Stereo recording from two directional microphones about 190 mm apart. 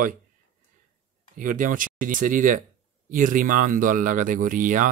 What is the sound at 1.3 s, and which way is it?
Speech, 45° right (ahead or behind).